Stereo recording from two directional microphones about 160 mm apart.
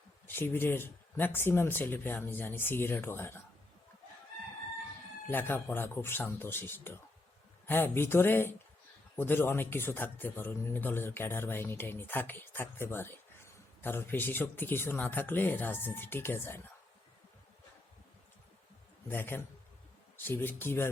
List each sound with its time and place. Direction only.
0.3 s speech: 15° left (ahead or behind)
5.3 s speech: 10° left (ahead or behind)
19.0 s speech: 10° left (ahead or behind)